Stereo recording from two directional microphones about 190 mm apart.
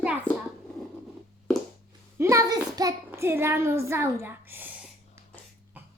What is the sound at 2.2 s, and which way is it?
Child singing, 15° right (ahead or behind).